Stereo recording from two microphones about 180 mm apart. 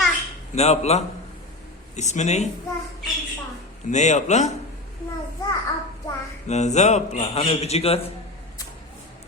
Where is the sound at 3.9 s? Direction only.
40° left (ahead or behind).